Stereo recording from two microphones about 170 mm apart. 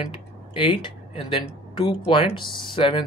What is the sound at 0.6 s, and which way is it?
Speech, 30° left (ahead or behind).